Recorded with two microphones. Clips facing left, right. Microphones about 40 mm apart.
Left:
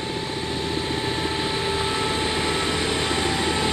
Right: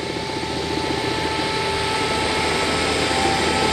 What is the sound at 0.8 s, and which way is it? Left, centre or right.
Vehicle, right.